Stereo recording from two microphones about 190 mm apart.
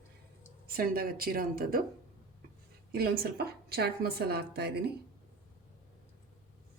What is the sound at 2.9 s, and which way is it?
Speech, 55° right (ahead or behind).